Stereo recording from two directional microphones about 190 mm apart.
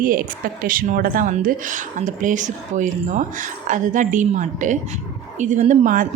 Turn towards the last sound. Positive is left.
turn(degrees=-40)  # may be behind; listen again after turning